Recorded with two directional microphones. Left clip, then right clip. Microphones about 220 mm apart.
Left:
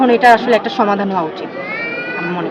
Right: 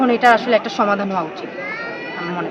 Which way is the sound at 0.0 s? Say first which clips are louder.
Left 4 dB; 10° right (ahead or behind).